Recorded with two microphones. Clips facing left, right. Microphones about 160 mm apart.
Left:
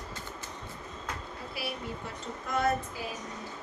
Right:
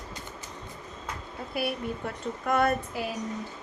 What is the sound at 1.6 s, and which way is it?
A woman's voice, 50° right (ahead or behind).